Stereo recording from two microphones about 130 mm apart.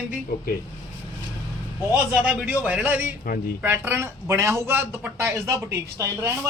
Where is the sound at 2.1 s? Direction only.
10° right (ahead or behind).